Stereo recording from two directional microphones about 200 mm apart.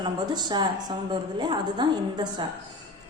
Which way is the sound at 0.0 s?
20° right (ahead or behind).